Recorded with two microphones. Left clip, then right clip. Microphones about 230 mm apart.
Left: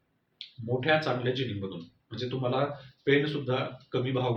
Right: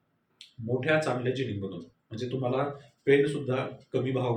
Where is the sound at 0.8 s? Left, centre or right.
Centre.